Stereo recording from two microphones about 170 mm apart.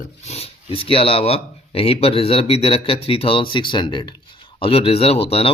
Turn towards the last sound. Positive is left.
turn(degrees=35)  # may be behind; listen again after turning